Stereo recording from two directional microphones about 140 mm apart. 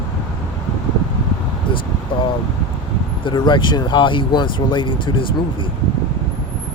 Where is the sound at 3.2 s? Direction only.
30° left (ahead or behind).